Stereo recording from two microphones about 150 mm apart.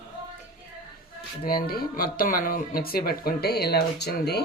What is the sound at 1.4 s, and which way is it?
Speech, 85° left.